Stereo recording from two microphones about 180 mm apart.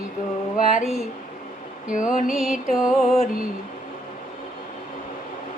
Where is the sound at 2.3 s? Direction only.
Centre (ahead or behind).